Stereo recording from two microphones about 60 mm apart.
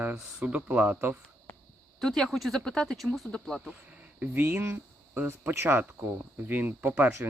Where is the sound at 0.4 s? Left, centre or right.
Right.